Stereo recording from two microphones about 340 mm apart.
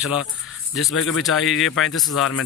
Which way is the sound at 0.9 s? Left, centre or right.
Left.